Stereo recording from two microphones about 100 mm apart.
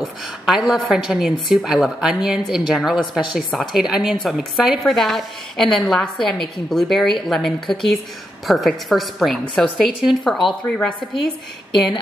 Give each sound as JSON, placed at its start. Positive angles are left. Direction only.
{"t": 0.0, "sound": "a woman's voice", "side_deg": 0}